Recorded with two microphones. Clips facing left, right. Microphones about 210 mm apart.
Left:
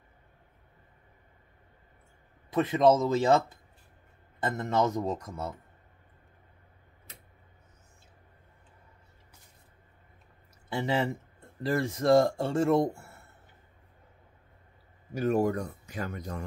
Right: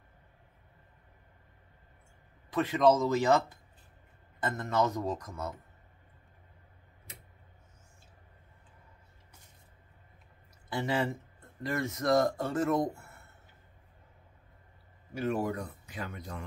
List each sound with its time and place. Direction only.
2.5 s speech: 25° left (ahead or behind)
10.7 s speech: 25° left (ahead or behind)
15.1 s speech: 45° left (ahead or behind)